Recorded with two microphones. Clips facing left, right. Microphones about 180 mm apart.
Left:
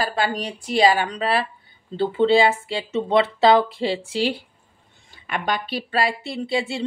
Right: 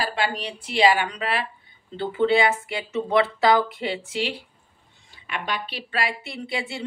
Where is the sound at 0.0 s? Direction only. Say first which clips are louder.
Left 3 dB; 40° left (ahead or behind).